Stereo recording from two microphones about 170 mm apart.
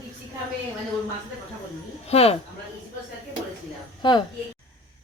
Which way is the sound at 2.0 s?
35° left (ahead or behind).